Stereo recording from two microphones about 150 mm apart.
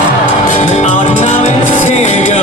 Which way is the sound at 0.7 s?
50° left (ahead or behind).